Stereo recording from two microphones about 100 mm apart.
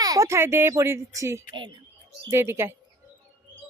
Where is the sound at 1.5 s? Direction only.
50° right (ahead or behind).